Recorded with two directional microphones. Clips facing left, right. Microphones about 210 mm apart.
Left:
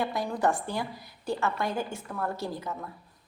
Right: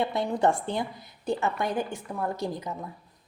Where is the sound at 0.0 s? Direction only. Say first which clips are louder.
Right 3 dB; 25° right (ahead or behind).